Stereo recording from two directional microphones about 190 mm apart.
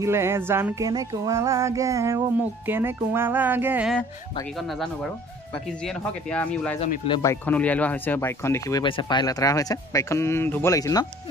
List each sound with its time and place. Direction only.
0.0 s music: 15° right (ahead or behind)
4.6 s speech: centre (ahead or behind)
7.1 s speech: 15° left (ahead or behind)